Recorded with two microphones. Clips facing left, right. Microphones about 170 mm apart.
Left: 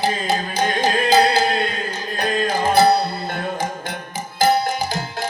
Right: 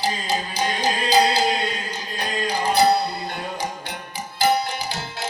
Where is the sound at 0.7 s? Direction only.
55° left (ahead or behind).